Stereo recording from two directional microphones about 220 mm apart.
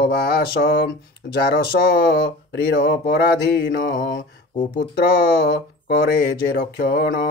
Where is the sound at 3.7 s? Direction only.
60° left (ahead or behind).